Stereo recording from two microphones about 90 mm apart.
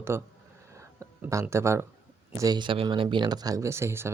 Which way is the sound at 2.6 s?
70° right (ahead or behind).